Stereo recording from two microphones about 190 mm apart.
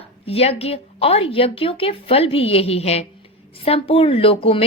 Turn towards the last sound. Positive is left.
turn(degrees=30)  # may be behind; listen again after turning